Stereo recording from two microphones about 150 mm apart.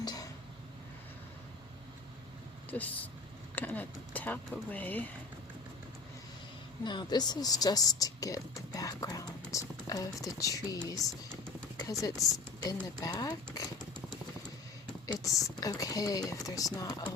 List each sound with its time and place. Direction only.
0.0 s a sound: 25° left (ahead or behind)
2.6 s speech: 10° left (ahead or behind)
6.8 s speech: 30° left (ahead or behind)
15.0 s speech: 20° left (ahead or behind)